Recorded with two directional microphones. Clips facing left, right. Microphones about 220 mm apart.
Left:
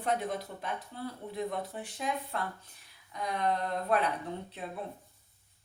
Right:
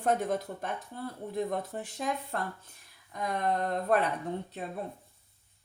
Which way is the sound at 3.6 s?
45° right (ahead or behind).